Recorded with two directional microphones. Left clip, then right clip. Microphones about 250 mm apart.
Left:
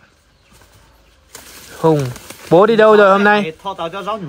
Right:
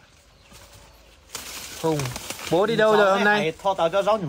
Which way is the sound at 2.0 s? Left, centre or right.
Centre.